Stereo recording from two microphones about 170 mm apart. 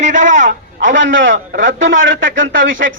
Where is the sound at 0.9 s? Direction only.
90° right.